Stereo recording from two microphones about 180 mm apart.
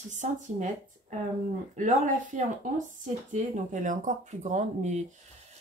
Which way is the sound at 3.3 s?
45° right (ahead or behind).